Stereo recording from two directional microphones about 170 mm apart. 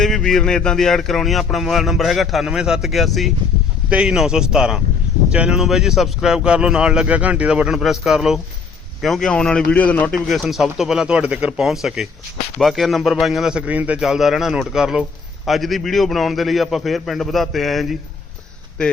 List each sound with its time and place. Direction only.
0.0 s speech: 5° left (ahead or behind)